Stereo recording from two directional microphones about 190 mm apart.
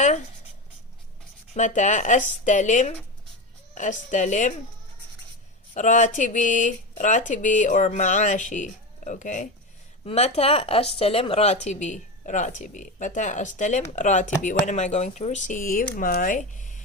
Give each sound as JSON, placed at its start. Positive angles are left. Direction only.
{"t": 1.5, "sound": "speech", "side_deg": 40}
{"t": 5.7, "sound": "speech", "side_deg": 40}